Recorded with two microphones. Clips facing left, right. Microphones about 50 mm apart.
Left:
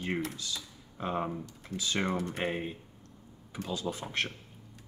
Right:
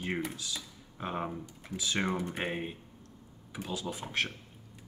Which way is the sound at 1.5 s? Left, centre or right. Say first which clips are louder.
Left 1 dB; centre.